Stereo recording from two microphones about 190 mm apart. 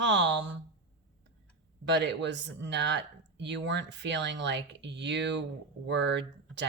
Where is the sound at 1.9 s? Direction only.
65° right (ahead or behind).